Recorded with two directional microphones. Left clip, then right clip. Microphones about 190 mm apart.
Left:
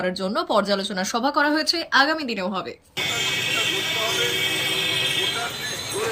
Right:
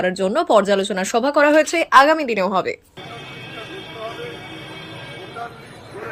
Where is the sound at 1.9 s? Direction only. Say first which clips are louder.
Right 8 dB; 25° right (ahead or behind).